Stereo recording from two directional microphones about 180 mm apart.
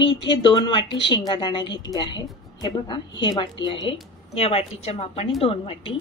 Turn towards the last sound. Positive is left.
turn(degrees=30)  # may be behind; listen again after turning